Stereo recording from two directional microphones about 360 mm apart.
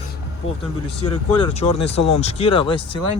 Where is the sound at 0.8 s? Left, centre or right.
Centre.